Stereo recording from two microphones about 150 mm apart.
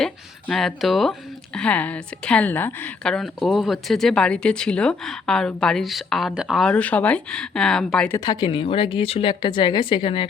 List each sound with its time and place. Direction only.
0.5 s a woman's voice: centre (ahead or behind)
8.1 s a woman's voice: 25° left (ahead or behind)